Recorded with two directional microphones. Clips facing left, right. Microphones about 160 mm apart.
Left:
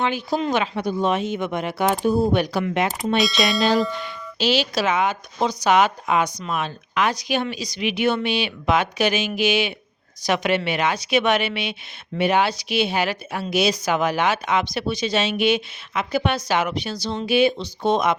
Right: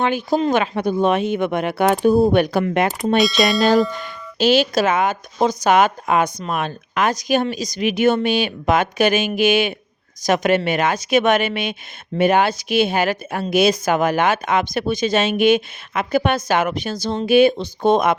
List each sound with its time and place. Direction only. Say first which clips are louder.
0.0 s a woman's voice: right 4 dB; 50° right (ahead or behind)
3.2 s speech: right 4 dB; centre (ahead or behind)
3.9 s a woman's voice: right 3 dB; 45° right (ahead or behind)